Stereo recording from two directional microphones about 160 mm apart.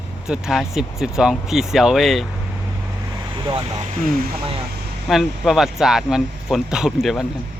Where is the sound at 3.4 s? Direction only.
30° right (ahead or behind).